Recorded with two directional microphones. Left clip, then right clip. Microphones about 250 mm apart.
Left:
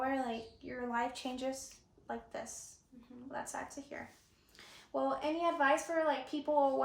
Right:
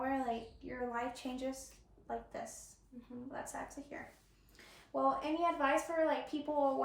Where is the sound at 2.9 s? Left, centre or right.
Centre.